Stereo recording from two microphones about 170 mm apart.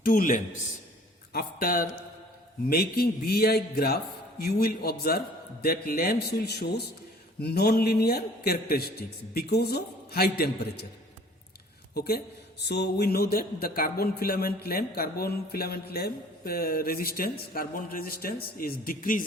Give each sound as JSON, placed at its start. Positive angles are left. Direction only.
{"t": 0.0, "sound": "a man's voice", "side_deg": 55}
{"t": 11.9, "sound": "speech", "side_deg": 65}